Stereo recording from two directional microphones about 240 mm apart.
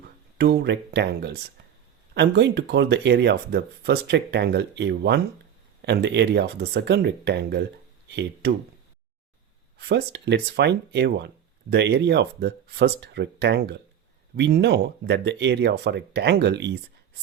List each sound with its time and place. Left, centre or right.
0.3 s speech: right
9.7 s speech: right